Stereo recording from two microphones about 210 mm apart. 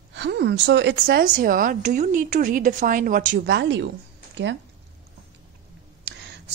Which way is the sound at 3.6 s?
55° right (ahead or behind).